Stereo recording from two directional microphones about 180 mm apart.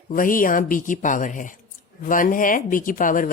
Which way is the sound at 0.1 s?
50° left (ahead or behind).